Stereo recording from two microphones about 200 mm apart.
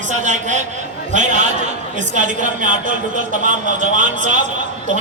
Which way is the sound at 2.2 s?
40° right (ahead or behind).